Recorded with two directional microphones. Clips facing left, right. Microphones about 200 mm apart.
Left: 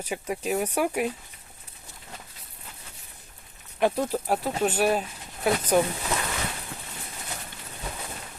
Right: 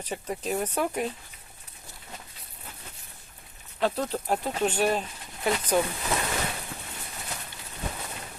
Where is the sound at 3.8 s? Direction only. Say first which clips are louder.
Left 3 dB; 10° left (ahead or behind).